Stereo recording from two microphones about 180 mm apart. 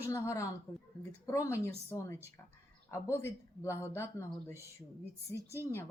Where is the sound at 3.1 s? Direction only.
15° left (ahead or behind).